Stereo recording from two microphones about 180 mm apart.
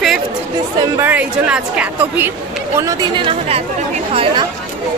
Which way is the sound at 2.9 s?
25° right (ahead or behind).